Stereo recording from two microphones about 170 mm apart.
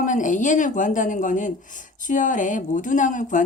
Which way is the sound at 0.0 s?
50° left (ahead or behind).